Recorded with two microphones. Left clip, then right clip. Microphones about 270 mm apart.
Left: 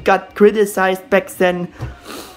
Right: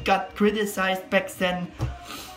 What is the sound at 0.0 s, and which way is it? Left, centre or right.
A woman's voice, centre.